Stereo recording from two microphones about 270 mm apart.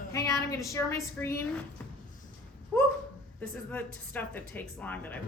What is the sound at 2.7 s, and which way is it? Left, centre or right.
A woman's voice, centre.